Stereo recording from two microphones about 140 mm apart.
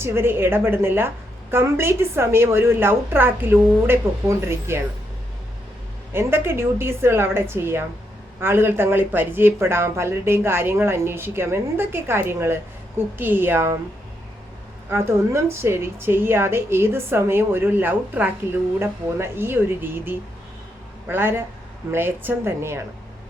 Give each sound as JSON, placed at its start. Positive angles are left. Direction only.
{"t": 0.0, "sound": "a woman's voice", "side_deg": -15}
{"t": 6.1, "sound": "a woman's voice", "side_deg": -15}
{"t": 14.8, "sound": "a woman's voice", "side_deg": -20}